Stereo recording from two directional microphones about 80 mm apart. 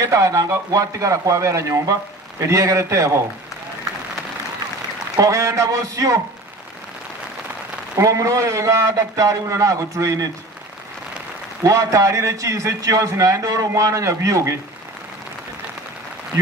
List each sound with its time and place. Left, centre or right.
0.0 s a man's voice: right
5.1 s speech: right
7.9 s a man's voice: right
11.6 s a man's voice: right